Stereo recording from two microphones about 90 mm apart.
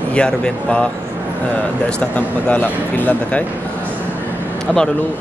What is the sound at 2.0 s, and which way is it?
Speech, 15° left (ahead or behind).